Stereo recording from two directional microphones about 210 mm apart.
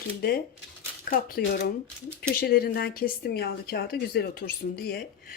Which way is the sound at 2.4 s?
45° left (ahead or behind).